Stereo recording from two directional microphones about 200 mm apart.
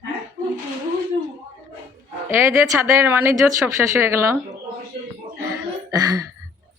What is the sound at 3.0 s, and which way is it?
Speech, 10° right (ahead or behind).